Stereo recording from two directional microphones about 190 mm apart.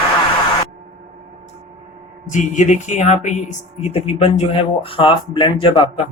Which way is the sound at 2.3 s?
40° left (ahead or behind).